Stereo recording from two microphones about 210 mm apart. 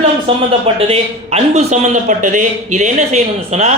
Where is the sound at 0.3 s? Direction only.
25° right (ahead or behind).